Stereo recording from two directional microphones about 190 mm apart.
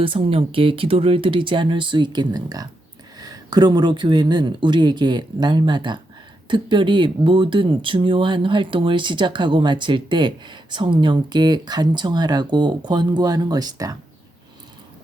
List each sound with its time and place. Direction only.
0.0 s speech: 30° right (ahead or behind)